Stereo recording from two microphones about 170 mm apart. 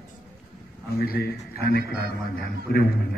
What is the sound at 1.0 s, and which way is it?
Speech, 65° left (ahead or behind).